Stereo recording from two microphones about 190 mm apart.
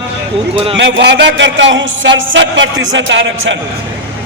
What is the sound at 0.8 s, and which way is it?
A man's voice, 70° right (ahead or behind).